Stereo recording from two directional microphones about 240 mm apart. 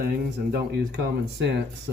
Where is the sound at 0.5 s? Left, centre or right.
Right.